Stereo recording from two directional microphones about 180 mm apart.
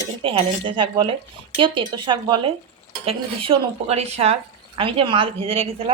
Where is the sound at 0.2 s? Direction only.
30° right (ahead or behind).